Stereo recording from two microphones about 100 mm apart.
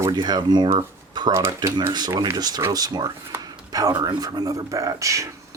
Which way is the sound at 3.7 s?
40° right (ahead or behind).